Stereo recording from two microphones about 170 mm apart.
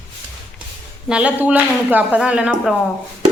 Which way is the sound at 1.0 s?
5° right (ahead or behind).